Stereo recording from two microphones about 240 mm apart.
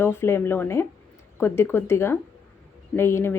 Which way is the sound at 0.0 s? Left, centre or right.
Centre.